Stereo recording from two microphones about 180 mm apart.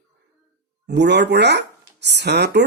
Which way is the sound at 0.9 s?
70° right (ahead or behind).